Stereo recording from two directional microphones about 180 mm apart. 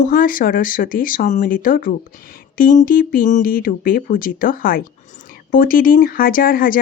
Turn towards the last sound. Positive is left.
turn(degrees=50)  # may be behind; listen again after turning